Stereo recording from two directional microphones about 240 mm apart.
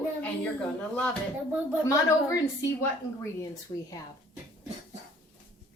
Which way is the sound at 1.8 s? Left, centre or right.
Centre.